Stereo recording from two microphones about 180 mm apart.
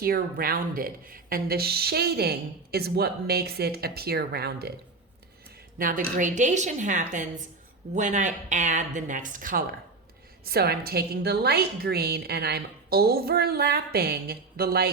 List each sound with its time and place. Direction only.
0.0 s a woman's voice: 55° right (ahead or behind)
5.8 s speech: 50° right (ahead or behind)
10.4 s a woman's voice: 60° right (ahead or behind)